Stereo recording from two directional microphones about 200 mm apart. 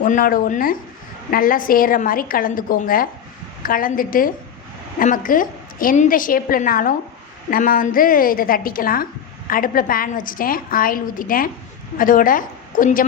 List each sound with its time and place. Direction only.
0.0 s a woman's voice: 40° left (ahead or behind)